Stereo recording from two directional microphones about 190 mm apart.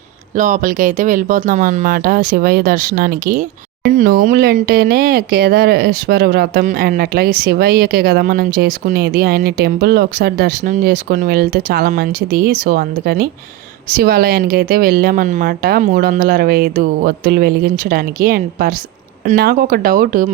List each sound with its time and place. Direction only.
0.3 s speech: 45° right (ahead or behind)